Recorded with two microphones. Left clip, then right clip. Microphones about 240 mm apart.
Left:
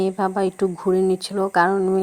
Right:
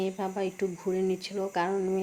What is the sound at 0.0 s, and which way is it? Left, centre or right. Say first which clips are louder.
Speech: left 10 dB; left.